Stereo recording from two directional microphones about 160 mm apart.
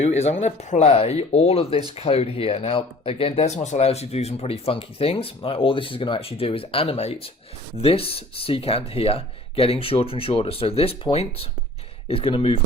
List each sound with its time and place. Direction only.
0.0 s speech: 45° left (ahead or behind)